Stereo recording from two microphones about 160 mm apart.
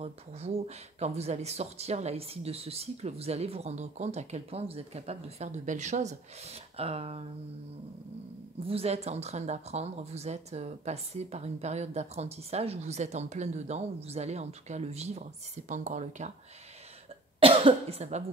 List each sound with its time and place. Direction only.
0.0 s speech: 40° right (ahead or behind)
8.6 s speech: 40° right (ahead or behind)
17.4 s speech: 35° right (ahead or behind)